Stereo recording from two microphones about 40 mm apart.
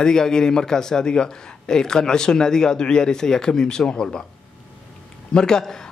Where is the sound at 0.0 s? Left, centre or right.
Centre.